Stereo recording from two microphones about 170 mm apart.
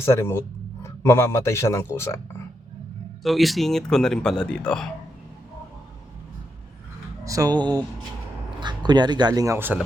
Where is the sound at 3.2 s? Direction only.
Centre (ahead or behind).